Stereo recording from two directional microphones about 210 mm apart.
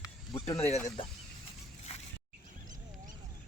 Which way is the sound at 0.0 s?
25° left (ahead or behind).